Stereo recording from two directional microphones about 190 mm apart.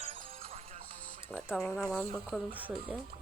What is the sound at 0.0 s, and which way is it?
Music, 30° right (ahead or behind).